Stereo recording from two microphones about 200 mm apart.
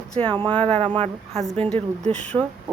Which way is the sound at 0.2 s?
30° right (ahead or behind).